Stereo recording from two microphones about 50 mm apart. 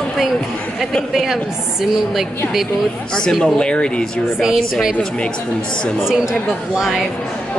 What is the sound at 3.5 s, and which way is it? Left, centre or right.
Speech, centre.